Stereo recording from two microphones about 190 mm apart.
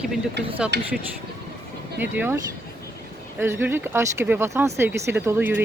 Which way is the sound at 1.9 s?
10° right (ahead or behind).